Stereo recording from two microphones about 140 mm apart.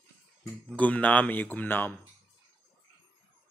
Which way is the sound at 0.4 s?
5° left (ahead or behind).